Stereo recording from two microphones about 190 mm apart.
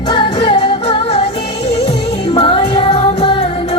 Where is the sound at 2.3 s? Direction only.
25° left (ahead or behind).